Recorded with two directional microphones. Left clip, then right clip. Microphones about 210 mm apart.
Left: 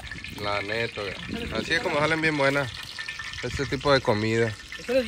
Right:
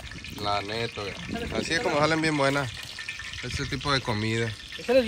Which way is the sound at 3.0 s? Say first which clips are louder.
Left 3 dB; 15° left (ahead or behind).